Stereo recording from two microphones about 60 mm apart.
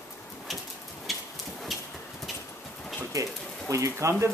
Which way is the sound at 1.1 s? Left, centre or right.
Centre.